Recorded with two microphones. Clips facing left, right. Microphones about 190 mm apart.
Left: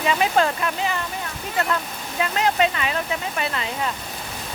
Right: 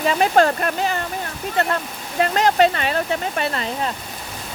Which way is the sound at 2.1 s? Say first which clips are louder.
Right 4 dB; 45° right (ahead or behind).